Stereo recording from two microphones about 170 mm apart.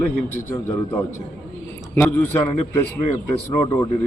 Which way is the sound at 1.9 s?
15° left (ahead or behind).